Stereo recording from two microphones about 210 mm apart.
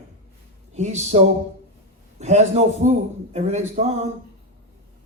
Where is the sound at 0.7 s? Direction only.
35° right (ahead or behind).